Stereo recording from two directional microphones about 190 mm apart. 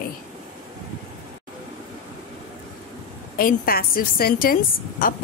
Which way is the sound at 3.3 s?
50° left (ahead or behind).